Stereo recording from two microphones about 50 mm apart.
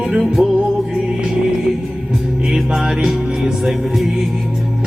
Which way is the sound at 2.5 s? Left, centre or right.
Centre.